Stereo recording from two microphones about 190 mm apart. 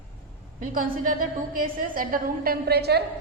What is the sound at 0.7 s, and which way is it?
A woman's voice, 45° right (ahead or behind).